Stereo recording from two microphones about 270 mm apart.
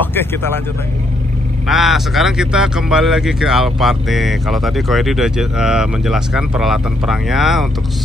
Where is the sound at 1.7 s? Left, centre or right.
Centre.